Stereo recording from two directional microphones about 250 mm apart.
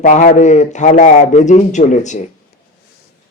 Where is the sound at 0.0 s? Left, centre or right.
Left.